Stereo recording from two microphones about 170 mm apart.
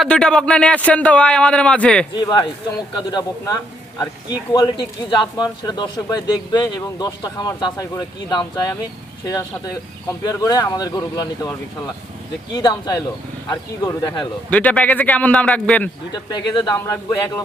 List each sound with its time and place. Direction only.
0.0 s a man's voice: 5° left (ahead or behind)
2.2 s a man's voice: 25° left (ahead or behind)
12.5 s a man's voice: 25° left (ahead or behind)
14.5 s a man's voice: 10° left (ahead or behind)
16.1 s a man's voice: 25° left (ahead or behind)